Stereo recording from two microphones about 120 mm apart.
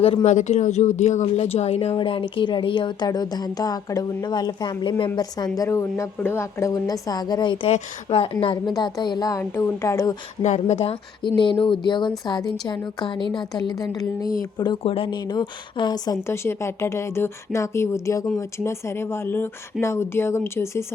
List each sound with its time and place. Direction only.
0.3 s speech: 75° left (ahead or behind); by 2.0 s 55° left (ahead or behind)
2.0 s speech: 45° left (ahead or behind)
5.5 s a woman's voice: 25° left (ahead or behind); by 7.7 s 40° left (ahead or behind)
7.7 s a woman's voice: 55° left (ahead or behind)
8.6 s speech: 35° left (ahead or behind)
9.4 s a woman's voice: 25° left (ahead or behind)
10.4 s speech: 75° left (ahead or behind)
11.2 s speech: 45° left (ahead or behind)
14.8 s speech: 50° left (ahead or behind)
16.2 s a woman's voice: 20° left (ahead or behind)